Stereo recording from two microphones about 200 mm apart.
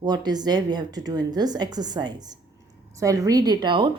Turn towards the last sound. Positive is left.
turn(degrees=-25)  # may be behind; listen again after turning